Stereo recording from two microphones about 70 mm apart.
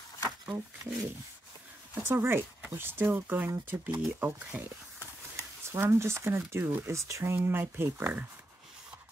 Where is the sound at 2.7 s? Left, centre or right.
Right.